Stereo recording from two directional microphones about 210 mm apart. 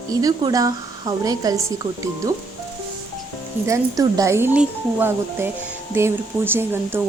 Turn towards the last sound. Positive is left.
turn(degrees=-10)  # may be behind; listen again after turning